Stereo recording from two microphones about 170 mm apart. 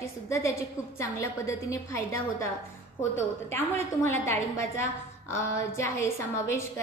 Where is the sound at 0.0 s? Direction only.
15° left (ahead or behind).